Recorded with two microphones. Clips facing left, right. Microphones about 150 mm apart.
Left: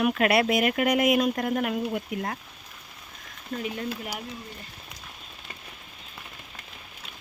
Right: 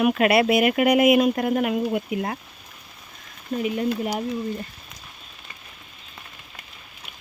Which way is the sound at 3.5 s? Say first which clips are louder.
Right 6 dB; 15° right (ahead or behind).